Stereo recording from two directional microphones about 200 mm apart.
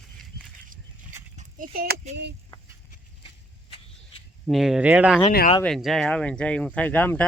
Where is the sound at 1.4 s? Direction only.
40° right (ahead or behind).